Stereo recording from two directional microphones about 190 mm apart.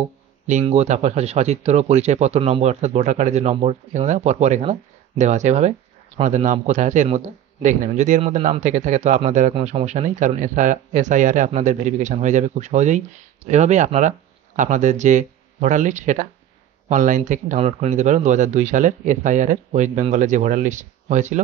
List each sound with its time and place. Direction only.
0.5 s speech: 35° right (ahead or behind)